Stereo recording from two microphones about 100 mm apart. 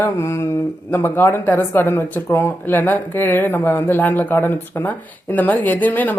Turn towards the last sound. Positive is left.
turn(degrees=15)  # may be behind; listen again after turning